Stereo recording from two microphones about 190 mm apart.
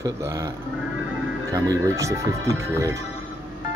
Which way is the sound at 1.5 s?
15° right (ahead or behind).